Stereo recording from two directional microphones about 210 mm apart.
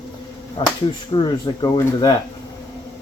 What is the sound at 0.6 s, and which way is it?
Speech, 25° left (ahead or behind).